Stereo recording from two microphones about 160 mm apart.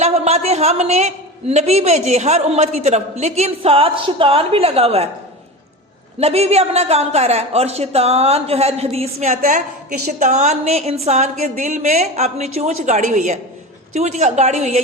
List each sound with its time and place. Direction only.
0.0 s a woman's voice: 40° right (ahead or behind)
6.1 s a woman's voice: 40° right (ahead or behind)